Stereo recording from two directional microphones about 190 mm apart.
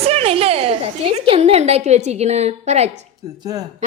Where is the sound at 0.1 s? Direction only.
30° right (ahead or behind).